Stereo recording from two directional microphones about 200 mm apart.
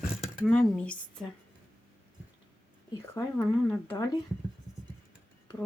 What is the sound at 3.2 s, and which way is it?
Speech, 10° left (ahead or behind).